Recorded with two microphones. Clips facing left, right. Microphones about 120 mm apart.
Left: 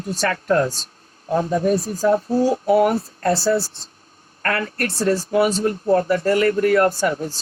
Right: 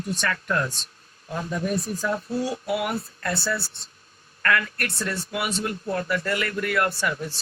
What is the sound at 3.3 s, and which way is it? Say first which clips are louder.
Speech: left 10 dB; 30° left (ahead or behind).